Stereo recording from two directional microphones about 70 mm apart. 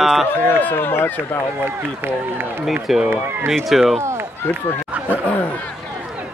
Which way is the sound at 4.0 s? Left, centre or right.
Right.